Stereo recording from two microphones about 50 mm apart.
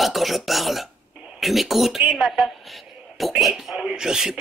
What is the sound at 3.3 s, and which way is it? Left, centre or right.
Speech, centre.